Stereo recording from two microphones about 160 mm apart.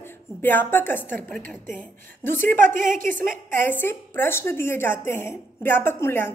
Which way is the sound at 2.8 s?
55° right (ahead or behind).